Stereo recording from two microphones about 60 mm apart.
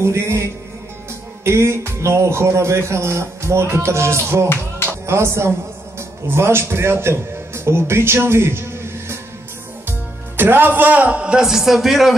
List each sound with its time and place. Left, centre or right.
0.0 s a man's voice: right
9.8 s music: right
11.1 s speech: centre